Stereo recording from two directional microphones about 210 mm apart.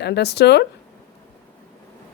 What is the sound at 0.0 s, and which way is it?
Speech, 50° left (ahead or behind).